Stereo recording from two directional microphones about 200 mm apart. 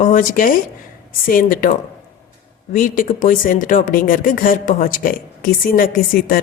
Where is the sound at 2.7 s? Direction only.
45° left (ahead or behind).